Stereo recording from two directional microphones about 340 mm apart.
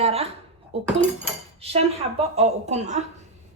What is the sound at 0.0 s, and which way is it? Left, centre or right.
A woman's voice, centre.